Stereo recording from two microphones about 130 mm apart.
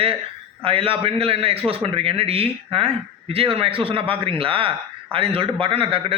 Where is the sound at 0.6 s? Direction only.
45° right (ahead or behind).